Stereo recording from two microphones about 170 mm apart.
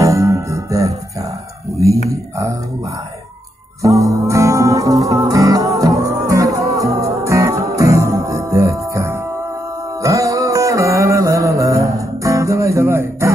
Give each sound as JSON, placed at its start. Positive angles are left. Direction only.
{"t": 0.0, "sound": "music", "side_deg": -20}
{"t": 3.8, "sound": "music", "side_deg": -20}